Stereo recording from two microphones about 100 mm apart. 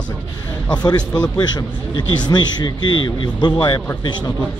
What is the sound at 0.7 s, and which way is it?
Speech, 45° left (ahead or behind).